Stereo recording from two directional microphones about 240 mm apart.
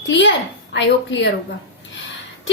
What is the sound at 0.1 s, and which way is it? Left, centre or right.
A woman's voice, left.